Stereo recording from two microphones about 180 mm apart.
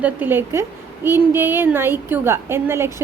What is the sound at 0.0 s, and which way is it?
A woman's voice, 10° right (ahead or behind).